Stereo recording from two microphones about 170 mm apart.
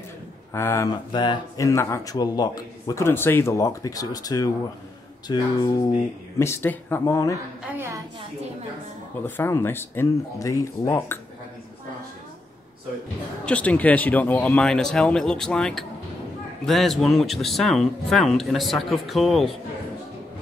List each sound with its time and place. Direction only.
0.5 s speech: 15° left (ahead or behind)
1.1 s a man's voice: 25° left (ahead or behind)
9.2 s speech: 15° left (ahead or behind)
13.5 s speech: 10° left (ahead or behind)